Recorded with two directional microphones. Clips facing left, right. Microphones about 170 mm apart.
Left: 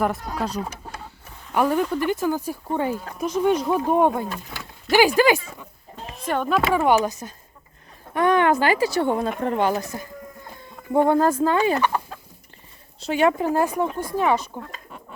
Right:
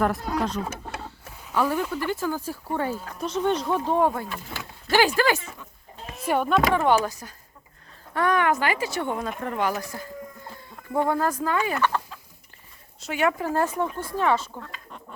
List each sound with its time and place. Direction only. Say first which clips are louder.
0.0 s speech: even; 5° left (ahead or behind)
1.5 s speech: left 4 dB; 15° left (ahead or behind)
6.2 s speech: right 1 dB; 10° right (ahead or behind)
6.7 s speech: left 2 dB; 10° left (ahead or behind); by 11.8 s 30° left (ahead or behind)
11.8 s chicken: left 2 dB; 10° left (ahead or behind)
13.0 s speech: left 5 dB; 30° left (ahead or behind)
13.5 s speech: left 3 dB; 15° left (ahead or behind)